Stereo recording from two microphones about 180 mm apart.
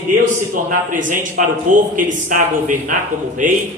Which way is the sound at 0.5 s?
45° right (ahead or behind).